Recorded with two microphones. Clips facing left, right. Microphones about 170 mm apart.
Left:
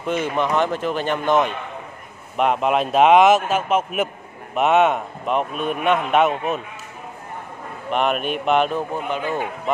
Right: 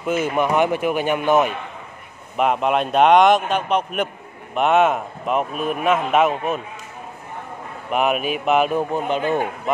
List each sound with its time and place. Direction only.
0.0 s a man's voice: 5° right (ahead or behind)
7.9 s a man's voice: 5° right (ahead or behind)
8.9 s speech: 20° right (ahead or behind)